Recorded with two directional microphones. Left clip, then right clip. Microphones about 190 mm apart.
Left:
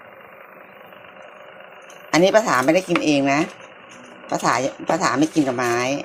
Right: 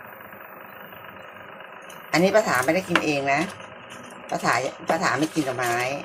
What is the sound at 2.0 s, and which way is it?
Speech, 40° left (ahead or behind).